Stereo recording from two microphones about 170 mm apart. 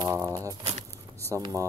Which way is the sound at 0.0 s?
20° right (ahead or behind).